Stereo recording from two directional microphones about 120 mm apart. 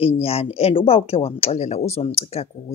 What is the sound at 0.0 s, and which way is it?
Speech, 55° left (ahead or behind).